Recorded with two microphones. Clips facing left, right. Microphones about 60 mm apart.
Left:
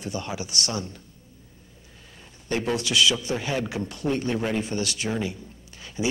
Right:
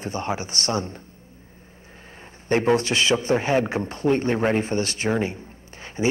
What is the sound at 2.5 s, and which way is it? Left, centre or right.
A man's voice, right.